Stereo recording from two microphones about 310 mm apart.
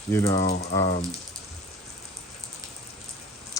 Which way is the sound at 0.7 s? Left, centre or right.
Left.